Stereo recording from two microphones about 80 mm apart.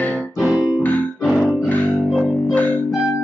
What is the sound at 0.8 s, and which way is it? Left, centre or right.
Music, centre.